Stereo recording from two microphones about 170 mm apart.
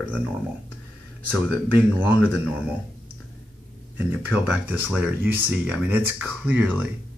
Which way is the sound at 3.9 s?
10° right (ahead or behind).